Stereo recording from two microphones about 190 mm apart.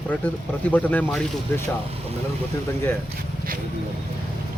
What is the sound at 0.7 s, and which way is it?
Speech, 10° left (ahead or behind).